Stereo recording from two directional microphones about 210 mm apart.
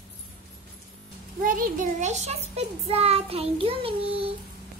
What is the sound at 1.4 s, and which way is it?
A child's voice, 40° right (ahead or behind).